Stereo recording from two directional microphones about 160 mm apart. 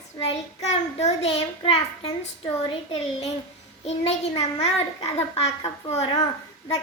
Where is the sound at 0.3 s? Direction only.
40° left (ahead or behind).